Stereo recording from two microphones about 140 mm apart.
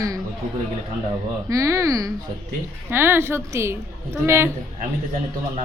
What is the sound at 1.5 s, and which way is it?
A woman's voice, 25° right (ahead or behind).